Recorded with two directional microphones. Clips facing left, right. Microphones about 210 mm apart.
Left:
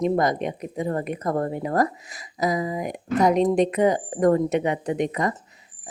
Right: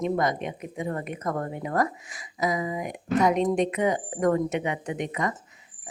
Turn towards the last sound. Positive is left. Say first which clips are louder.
# left 5 dB
turn(degrees=35)  # may be behind; listen again after turning